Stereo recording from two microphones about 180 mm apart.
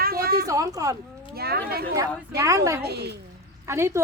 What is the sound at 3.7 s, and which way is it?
Speech, 15° right (ahead or behind).